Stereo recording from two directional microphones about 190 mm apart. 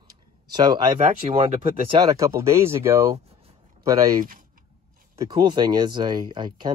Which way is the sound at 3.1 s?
30° right (ahead or behind).